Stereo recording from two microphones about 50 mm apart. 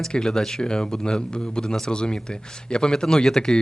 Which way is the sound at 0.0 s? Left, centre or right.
Centre.